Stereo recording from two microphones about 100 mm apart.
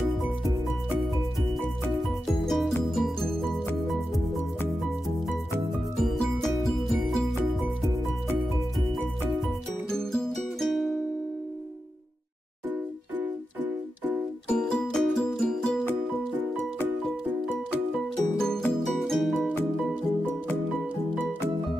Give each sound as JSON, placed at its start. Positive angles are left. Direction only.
{"t": 2.4, "sound": "music", "side_deg": 0}
{"t": 6.9, "sound": "music", "side_deg": 0}
{"t": 9.8, "sound": "music", "side_deg": 5}
{"t": 13.2, "sound": "music", "side_deg": -20}
{"t": 14.5, "sound": "music", "side_deg": 5}
{"t": 17.9, "sound": "music", "side_deg": 5}